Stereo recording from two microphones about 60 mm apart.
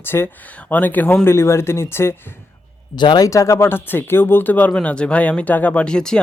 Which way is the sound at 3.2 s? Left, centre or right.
Left.